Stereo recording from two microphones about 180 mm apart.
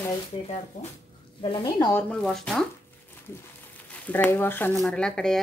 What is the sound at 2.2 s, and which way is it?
Speech, centre (ahead or behind).